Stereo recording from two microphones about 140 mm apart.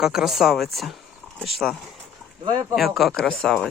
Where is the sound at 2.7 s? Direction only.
Centre (ahead or behind).